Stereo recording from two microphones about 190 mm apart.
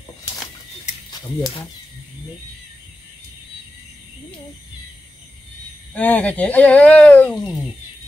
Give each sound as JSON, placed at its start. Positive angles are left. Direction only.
{"t": 5.9, "sound": "speech", "side_deg": 5}